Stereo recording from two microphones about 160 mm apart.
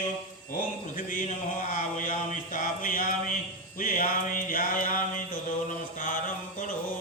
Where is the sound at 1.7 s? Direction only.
50° left (ahead or behind).